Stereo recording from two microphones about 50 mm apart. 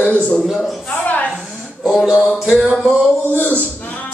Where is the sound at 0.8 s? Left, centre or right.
Left.